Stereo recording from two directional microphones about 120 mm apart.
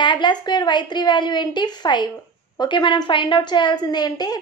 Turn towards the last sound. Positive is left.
turn(degrees=35)  # may be behind; listen again after turning